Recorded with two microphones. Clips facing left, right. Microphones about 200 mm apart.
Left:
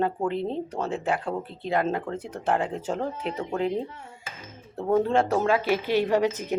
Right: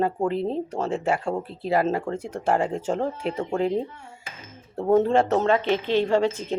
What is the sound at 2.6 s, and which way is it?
Speech, 5° left (ahead or behind).